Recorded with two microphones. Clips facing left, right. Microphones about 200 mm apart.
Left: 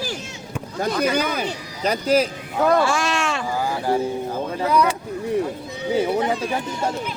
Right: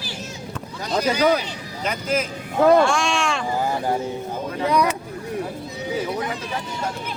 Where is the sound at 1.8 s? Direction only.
35° left (ahead or behind).